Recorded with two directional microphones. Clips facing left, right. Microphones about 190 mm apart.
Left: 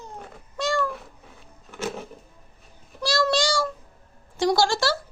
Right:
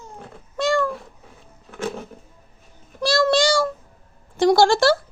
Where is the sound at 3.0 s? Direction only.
55° right (ahead or behind).